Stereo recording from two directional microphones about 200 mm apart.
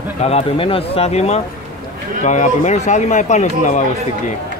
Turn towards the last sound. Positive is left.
turn(degrees=35)  # may be behind; listen again after turning